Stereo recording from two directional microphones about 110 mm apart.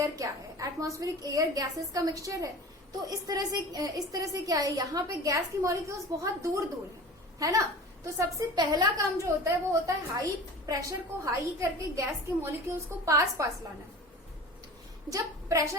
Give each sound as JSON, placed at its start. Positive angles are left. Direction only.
{"t": 0.0, "sound": "a woman's voice", "side_deg": -30}
{"t": 15.1, "sound": "a woman's voice", "side_deg": -30}